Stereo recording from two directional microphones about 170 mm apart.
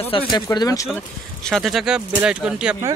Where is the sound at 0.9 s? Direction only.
5° left (ahead or behind).